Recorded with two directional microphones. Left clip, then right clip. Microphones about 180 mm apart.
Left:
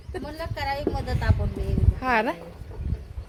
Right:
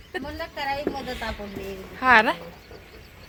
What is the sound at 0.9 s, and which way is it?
Speech, 20° left (ahead or behind).